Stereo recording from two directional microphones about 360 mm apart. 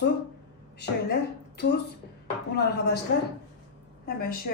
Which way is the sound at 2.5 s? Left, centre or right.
Left.